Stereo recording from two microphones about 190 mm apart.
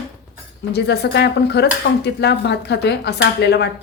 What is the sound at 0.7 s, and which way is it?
Speech, 60° left (ahead or behind).